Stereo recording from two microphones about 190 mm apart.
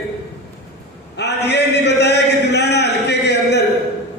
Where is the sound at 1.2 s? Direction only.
65° left (ahead or behind).